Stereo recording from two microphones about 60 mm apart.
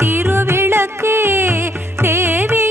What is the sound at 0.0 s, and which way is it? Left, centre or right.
Music, right.